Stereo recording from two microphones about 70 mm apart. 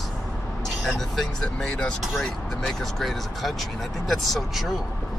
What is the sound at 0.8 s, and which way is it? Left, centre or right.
Speech, centre.